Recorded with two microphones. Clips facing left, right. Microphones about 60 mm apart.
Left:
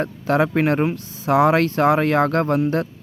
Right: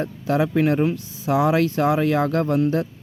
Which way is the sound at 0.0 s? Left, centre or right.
Left.